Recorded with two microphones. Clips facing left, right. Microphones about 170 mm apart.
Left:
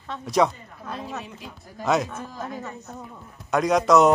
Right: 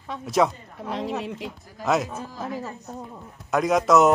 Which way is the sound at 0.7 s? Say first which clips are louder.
Right 8 dB; 90° right.